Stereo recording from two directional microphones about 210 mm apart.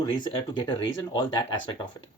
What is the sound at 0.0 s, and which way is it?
Speech, 25° left (ahead or behind).